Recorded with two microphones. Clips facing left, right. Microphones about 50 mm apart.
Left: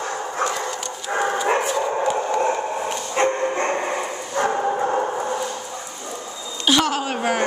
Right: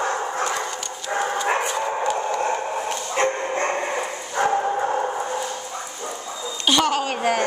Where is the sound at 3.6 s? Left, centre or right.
Centre.